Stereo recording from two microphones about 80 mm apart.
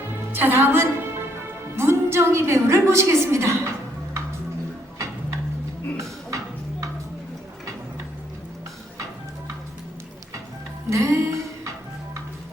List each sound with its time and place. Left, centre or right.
0.1 s music: right
6.3 s a sound: right
10.8 s music: right